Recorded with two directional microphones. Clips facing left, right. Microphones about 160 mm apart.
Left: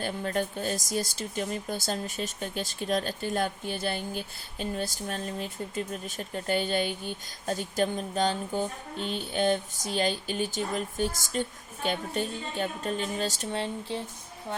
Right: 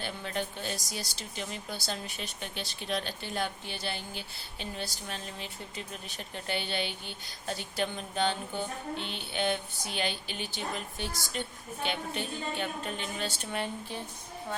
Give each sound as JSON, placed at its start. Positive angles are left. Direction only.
{"t": 0.0, "sound": "speech", "side_deg": 45}
{"t": 13.5, "sound": "speech", "side_deg": 25}